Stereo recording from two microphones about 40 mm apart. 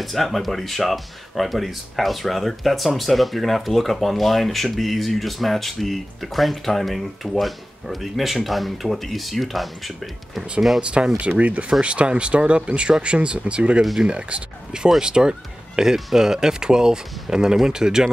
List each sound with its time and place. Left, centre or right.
0.0 s speech: centre
10.8 s speech: right